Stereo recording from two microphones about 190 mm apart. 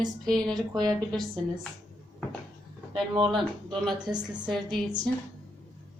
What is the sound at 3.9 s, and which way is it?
A woman's voice, 20° right (ahead or behind).